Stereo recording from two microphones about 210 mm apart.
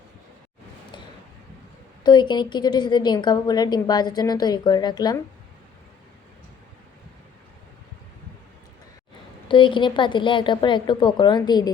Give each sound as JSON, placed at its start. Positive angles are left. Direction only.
{"t": 2.0, "sound": "a woman's voice", "side_deg": 20}
{"t": 9.5, "sound": "a woman's voice", "side_deg": 25}